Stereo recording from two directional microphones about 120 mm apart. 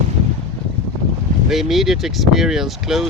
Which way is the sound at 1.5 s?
Centre (ahead or behind).